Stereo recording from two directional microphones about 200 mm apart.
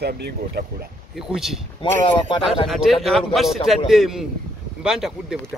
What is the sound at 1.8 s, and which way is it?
Speech, 25° left (ahead or behind).